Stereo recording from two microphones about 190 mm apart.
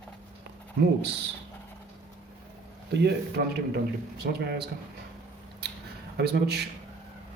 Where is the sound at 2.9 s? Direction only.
60° right (ahead or behind).